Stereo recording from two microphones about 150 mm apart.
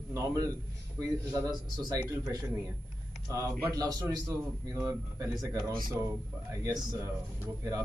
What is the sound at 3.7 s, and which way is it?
A man's voice, 25° right (ahead or behind).